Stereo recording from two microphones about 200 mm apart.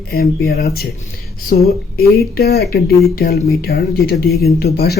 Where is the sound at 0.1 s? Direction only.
50° left (ahead or behind).